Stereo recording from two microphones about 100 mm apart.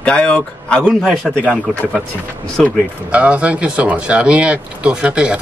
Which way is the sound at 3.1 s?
15° right (ahead or behind).